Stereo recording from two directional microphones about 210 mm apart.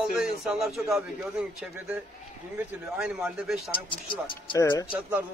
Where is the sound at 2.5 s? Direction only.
5° right (ahead or behind).